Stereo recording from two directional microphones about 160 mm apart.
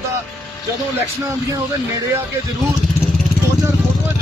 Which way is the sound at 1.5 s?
20° right (ahead or behind).